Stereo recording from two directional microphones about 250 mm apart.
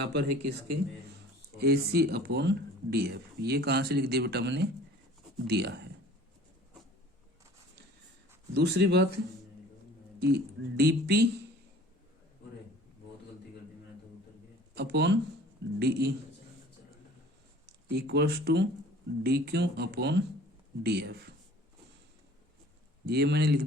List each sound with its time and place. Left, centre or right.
0.0 s speech: right
1.5 s speech: right
8.5 s speech: right
14.8 s speech: right
17.7 s speech: right
23.0 s speech: right